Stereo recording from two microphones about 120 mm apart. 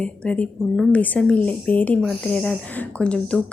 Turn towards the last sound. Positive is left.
turn(degrees=10)  # may be behind; listen again after turning